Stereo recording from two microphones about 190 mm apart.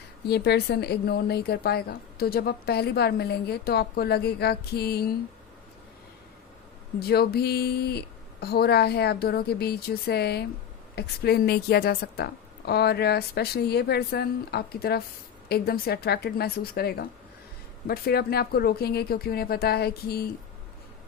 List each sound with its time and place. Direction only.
0.3 s a woman's voice: 60° left (ahead or behind)
7.0 s a woman's voice: 55° left (ahead or behind)